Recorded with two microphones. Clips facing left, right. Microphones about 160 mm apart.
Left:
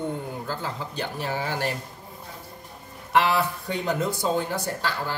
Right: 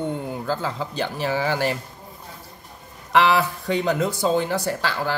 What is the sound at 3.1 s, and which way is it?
A woman's voice, 90° right.